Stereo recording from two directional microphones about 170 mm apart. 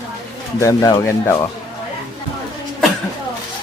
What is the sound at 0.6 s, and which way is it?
Speech, 20° left (ahead or behind).